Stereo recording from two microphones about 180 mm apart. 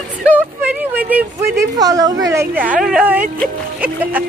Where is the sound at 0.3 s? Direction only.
10° right (ahead or behind).